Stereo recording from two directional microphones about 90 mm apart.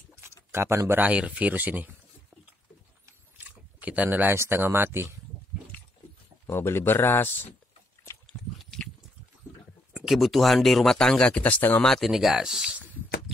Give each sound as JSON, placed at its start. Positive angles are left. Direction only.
{"t": 0.1, "sound": "a sound", "side_deg": -30}
{"t": 1.0, "sound": "speech", "side_deg": -15}
{"t": 3.3, "sound": "speech", "side_deg": -15}
{"t": 6.4, "sound": "speech", "side_deg": 25}
{"t": 8.3, "sound": "horse", "side_deg": 10}
{"t": 9.9, "sound": "speech", "side_deg": 0}
{"t": 11.8, "sound": "speech", "side_deg": 5}